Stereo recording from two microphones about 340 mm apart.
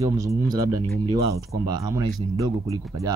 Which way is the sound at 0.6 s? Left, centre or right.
Right.